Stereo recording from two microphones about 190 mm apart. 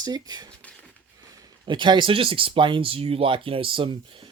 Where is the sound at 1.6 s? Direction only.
25° right (ahead or behind).